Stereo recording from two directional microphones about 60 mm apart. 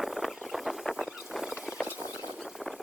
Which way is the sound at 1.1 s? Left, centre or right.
Centre.